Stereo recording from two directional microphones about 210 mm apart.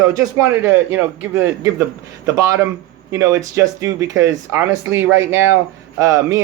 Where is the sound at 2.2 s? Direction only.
15° right (ahead or behind).